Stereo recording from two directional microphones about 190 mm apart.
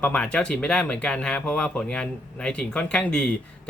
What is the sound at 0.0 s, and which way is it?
Speech, 5° left (ahead or behind).